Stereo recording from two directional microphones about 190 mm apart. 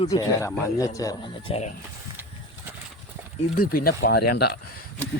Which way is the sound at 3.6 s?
50° left (ahead or behind).